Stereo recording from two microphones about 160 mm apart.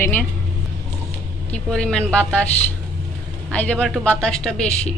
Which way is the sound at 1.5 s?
5° left (ahead or behind).